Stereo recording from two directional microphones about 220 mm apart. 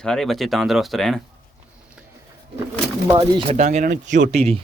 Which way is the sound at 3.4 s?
30° right (ahead or behind).